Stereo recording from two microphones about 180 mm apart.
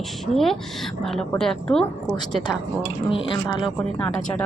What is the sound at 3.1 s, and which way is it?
Speech, 30° left (ahead or behind).